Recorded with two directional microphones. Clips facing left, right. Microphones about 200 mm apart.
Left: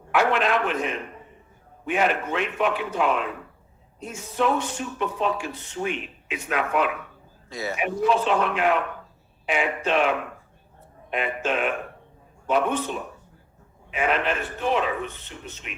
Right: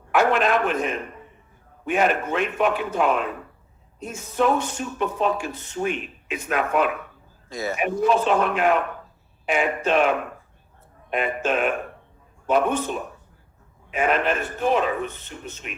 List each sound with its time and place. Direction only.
0.1 s speech: 45° right (ahead or behind)